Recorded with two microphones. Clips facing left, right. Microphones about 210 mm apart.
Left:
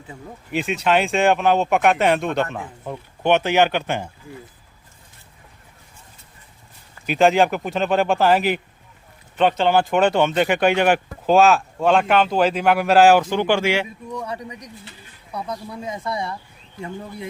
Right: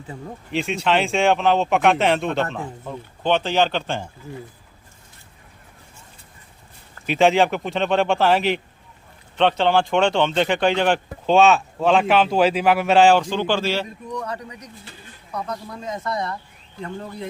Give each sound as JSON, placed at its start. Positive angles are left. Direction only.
{"t": 0.5, "sound": "speech", "side_deg": 0}
{"t": 3.2, "sound": "speech", "side_deg": 10}
{"t": 7.1, "sound": "speech", "side_deg": 0}